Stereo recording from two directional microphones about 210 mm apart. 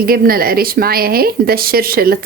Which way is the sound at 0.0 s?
45° right (ahead or behind).